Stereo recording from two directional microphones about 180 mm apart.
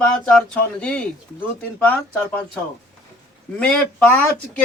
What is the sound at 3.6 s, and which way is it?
Speech, 5° left (ahead or behind).